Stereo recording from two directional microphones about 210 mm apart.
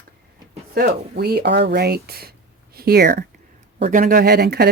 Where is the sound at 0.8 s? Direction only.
50° right (ahead or behind).